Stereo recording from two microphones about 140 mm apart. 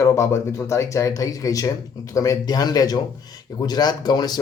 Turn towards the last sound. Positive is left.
turn(degrees=30)  # may be behind; listen again after turning